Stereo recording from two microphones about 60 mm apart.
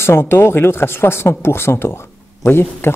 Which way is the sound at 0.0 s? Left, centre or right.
Left.